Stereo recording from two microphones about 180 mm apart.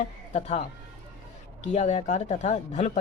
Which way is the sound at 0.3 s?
40° left (ahead or behind).